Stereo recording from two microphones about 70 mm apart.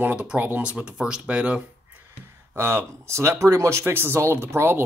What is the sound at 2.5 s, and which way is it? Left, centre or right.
Speech, right.